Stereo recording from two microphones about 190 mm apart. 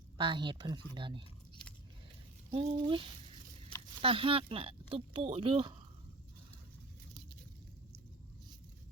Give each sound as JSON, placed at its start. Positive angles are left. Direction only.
{"t": 0.2, "sound": "speech", "side_deg": -25}
{"t": 2.5, "sound": "speech", "side_deg": -30}